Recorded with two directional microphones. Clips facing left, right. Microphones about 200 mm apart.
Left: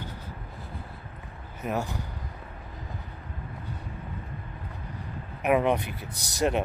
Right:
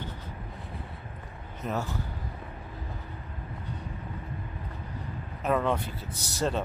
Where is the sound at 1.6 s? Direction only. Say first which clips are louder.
Left 2 dB; 10° left (ahead or behind).